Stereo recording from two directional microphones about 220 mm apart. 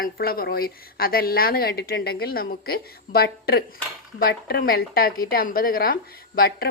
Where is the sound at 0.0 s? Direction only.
40° left (ahead or behind).